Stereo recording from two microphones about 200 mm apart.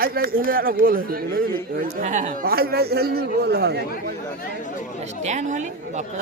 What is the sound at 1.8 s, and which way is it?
A man's voice, 35° right (ahead or behind).